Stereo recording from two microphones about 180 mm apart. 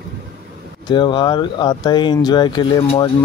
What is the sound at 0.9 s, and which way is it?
Speech, 25° left (ahead or behind).